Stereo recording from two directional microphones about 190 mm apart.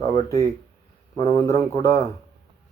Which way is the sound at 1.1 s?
20° left (ahead or behind).